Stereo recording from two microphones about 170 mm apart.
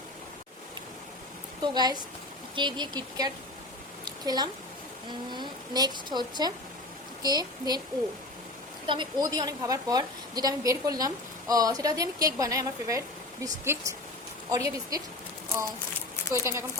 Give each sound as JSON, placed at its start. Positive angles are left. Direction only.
{"t": 1.6, "sound": "a woman's voice", "side_deg": -25}
{"t": 5.3, "sound": "a woman's voice", "side_deg": -25}
{"t": 8.9, "sound": "a woman's voice", "side_deg": -25}
{"t": 16.3, "sound": "speech", "side_deg": -15}